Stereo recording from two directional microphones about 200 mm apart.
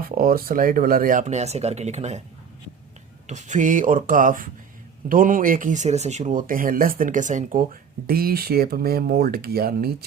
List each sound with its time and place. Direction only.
0.0 s speech: 45° right (ahead or behind)
3.2 s speech: 35° right (ahead or behind)